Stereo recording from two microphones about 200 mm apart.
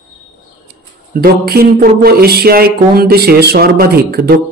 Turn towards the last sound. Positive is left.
turn(degrees=-50)  # may be behind; listen again after turning